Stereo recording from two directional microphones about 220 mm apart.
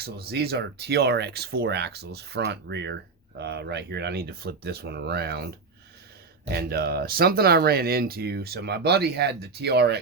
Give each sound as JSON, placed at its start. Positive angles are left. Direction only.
{"t": 0.0, "sound": "speech", "side_deg": -45}
{"t": 6.5, "sound": "speech", "side_deg": -45}